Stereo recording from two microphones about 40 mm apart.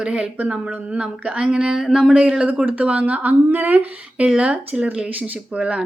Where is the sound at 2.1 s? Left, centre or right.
Right.